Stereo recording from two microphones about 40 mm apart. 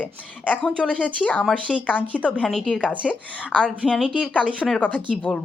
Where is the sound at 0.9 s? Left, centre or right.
Left.